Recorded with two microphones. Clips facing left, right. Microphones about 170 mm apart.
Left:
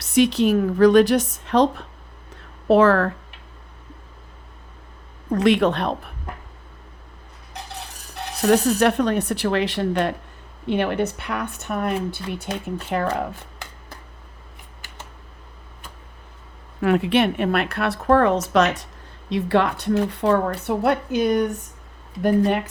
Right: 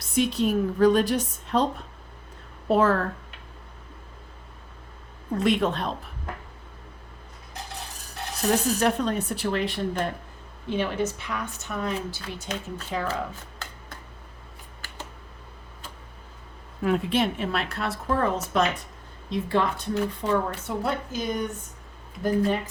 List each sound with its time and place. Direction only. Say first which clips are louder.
0.0 s speech: left 6 dB; 75° left (ahead or behind)
5.3 s speech: left 6 dB; 75° left (ahead or behind)
8.4 s speech: left 6 dB; 70° left (ahead or behind)
10.7 s a woman's voice: left 5 dB; 65° left (ahead or behind)
16.8 s speech: left 5 dB; 75° left (ahead or behind)